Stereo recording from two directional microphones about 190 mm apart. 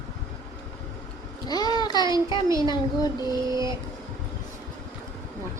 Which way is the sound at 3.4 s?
20° right (ahead or behind).